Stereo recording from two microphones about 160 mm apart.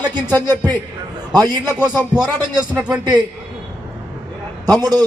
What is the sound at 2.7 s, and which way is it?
Speech, 5° right (ahead or behind).